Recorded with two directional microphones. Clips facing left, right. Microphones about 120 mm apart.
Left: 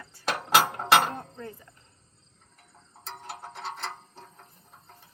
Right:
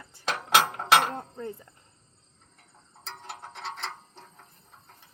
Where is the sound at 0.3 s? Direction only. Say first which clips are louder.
Left 1 dB; 10° left (ahead or behind).